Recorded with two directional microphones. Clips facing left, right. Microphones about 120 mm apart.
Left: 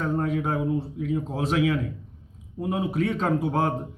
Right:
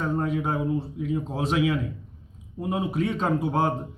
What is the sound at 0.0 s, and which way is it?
A man's voice, 20° right (ahead or behind).